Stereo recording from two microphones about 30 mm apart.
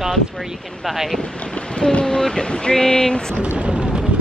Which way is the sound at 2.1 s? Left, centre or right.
Centre.